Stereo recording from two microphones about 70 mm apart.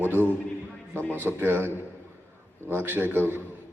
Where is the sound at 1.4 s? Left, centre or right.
Right.